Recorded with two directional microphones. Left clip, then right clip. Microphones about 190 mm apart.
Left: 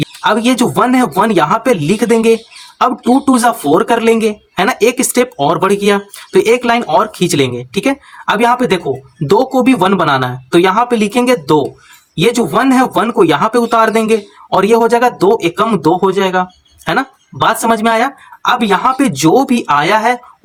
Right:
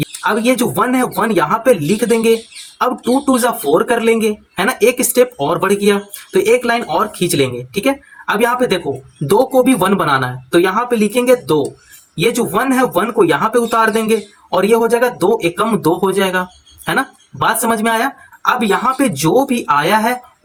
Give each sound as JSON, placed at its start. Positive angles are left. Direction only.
{"t": 0.0, "sound": "speech", "side_deg": 30}